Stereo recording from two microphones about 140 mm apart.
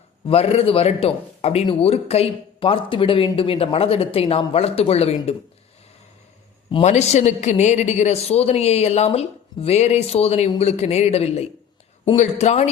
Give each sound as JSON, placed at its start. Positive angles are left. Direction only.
{"t": 0.3, "sound": "a woman's voice", "side_deg": 45}
{"t": 6.8, "sound": "a woman's voice", "side_deg": 55}